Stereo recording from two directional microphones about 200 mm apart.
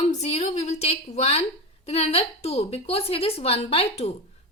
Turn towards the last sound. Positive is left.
turn(degrees=30)  # may be behind; listen again after turning